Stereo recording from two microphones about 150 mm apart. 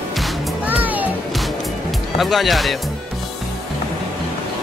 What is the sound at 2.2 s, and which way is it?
Speech, centre (ahead or behind).